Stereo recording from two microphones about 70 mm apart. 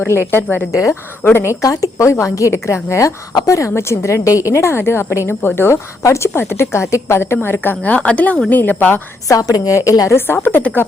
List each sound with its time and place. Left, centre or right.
0.1 s a woman's voice: left
0.7 s a woman's voice: left
1.2 s a woman's voice: left
1.6 s a woman's voice: left
9.3 s a woman's voice: left
10.2 s a woman's voice: left